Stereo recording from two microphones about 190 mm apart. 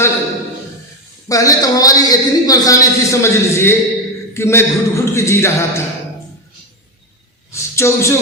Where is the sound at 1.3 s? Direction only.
20° left (ahead or behind).